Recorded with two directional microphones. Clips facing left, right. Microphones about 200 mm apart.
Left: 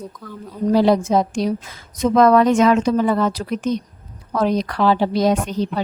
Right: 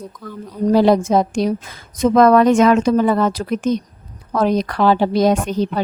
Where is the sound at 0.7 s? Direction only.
50° right (ahead or behind).